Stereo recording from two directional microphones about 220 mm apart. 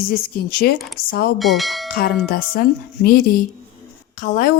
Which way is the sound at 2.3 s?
40° left (ahead or behind).